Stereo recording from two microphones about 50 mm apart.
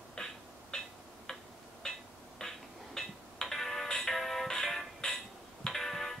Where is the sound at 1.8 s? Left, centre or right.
Centre.